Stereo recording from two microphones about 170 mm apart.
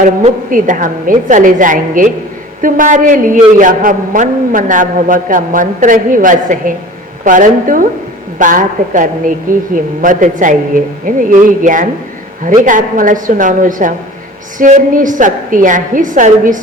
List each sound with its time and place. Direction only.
0.5 s a man's voice: 50° right (ahead or behind)